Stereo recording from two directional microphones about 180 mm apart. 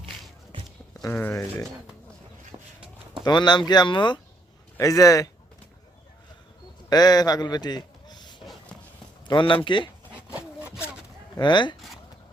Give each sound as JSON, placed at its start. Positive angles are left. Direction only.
{"t": 1.0, "sound": "speech", "side_deg": 10}
{"t": 2.5, "sound": "a sound", "side_deg": -30}
{"t": 3.2, "sound": "speech", "side_deg": 25}
{"t": 6.9, "sound": "a man's voice", "side_deg": 20}
{"t": 8.4, "sound": "a sound", "side_deg": 5}
{"t": 9.2, "sound": "speech", "side_deg": 25}
{"t": 10.2, "sound": "sawing", "side_deg": -10}
{"t": 11.3, "sound": "speech", "side_deg": 25}